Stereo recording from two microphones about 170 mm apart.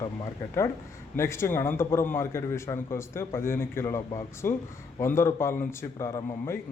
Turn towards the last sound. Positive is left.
turn(degrees=20)  # may be behind; listen again after turning